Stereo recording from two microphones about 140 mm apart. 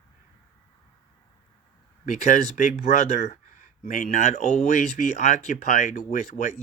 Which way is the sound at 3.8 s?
65° left (ahead or behind).